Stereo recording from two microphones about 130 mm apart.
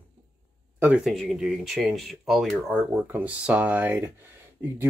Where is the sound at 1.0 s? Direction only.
Centre (ahead or behind).